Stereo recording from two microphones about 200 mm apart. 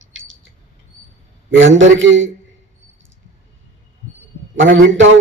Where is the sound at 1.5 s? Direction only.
70° right (ahead or behind).